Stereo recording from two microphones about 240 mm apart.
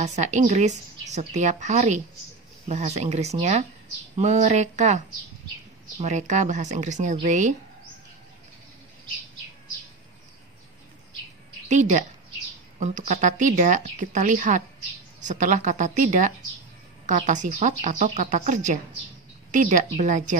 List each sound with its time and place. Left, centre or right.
0.0 s a woman's voice: right
11.7 s a woman's voice: right